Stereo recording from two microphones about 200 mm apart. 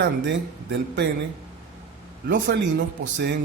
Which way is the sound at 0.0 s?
60° right (ahead or behind).